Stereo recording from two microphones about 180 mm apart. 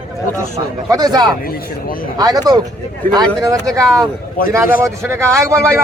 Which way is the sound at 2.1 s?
20° right (ahead or behind).